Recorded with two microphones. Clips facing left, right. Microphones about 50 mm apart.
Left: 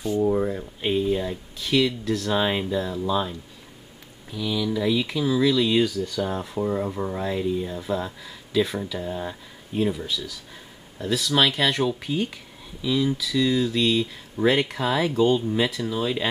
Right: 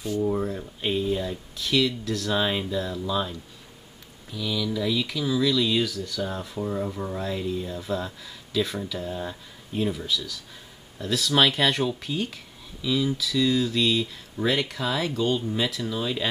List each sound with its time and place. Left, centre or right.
0.3 s speech: centre
14.4 s speech: centre